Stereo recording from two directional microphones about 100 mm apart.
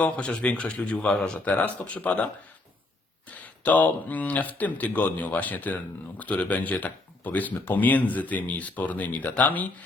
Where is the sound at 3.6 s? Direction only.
15° left (ahead or behind).